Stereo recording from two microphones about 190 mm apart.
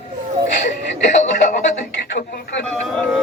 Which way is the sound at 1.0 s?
40° left (ahead or behind).